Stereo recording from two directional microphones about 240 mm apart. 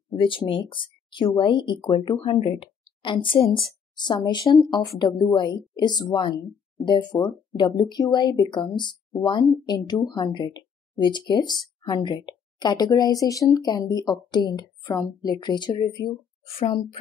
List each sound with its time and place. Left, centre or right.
0.1 s speech: centre